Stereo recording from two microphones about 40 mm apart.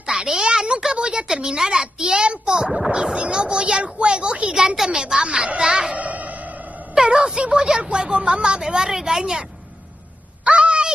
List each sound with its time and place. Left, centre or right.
0.0 s a sound: centre
0.9 s speech: right
1.2 s speech: centre
4.6 s speech: centre
5.9 s music: right
7.0 s speech: centre
10.4 s a sound: right